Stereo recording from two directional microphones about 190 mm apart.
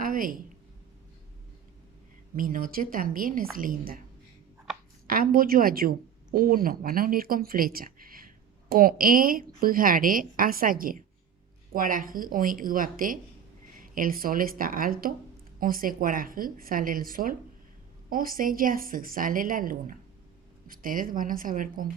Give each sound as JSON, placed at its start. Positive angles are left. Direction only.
{"t": 0.0, "sound": "a sound", "side_deg": -45}
{"t": 2.3, "sound": "a woman's voice", "side_deg": -45}
{"t": 5.0, "sound": "a woman's voice", "side_deg": -50}